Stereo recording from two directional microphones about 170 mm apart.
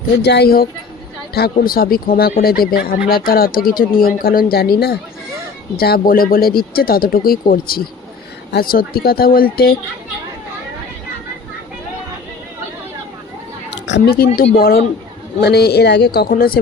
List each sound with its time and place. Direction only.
0.2 s speech: 75° left (ahead or behind)
13.7 s a sound: 90° left
14.5 s speech: 65° left (ahead or behind)